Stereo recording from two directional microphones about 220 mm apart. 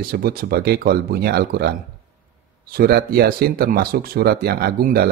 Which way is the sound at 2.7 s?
45° right (ahead or behind).